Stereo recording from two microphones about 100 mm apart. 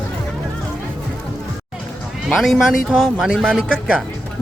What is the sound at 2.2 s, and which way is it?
Speech, centre (ahead or behind).